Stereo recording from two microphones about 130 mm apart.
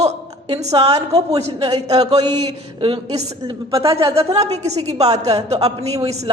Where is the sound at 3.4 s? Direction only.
25° right (ahead or behind).